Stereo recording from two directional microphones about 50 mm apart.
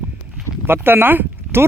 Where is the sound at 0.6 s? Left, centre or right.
Right.